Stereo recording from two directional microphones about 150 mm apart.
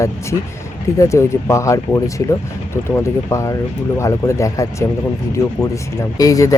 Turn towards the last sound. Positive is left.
turn(degrees=20)  # may be behind; listen again after turning